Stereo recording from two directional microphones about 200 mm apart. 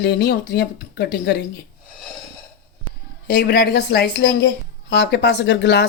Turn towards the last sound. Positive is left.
turn(degrees=60)  # may be behind; listen again after turning